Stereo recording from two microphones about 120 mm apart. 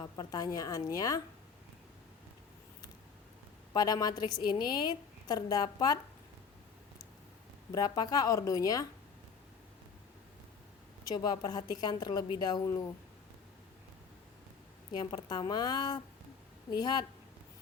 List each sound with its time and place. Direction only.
0.0 s a woman's voice: 30° left (ahead or behind)
3.7 s a woman's voice: 35° left (ahead or behind)
7.7 s a woman's voice: 35° left (ahead or behind)
11.1 s a woman's voice: 35° left (ahead or behind)
14.9 s a woman's voice: 40° left (ahead or behind)